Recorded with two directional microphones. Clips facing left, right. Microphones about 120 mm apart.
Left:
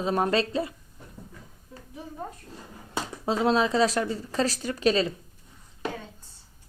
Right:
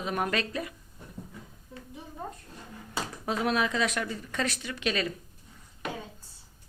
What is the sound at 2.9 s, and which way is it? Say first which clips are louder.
Speech: left 4 dB; 25° left (ahead or behind).